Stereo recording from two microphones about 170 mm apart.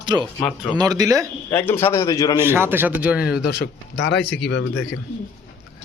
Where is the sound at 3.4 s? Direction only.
75° left (ahead or behind).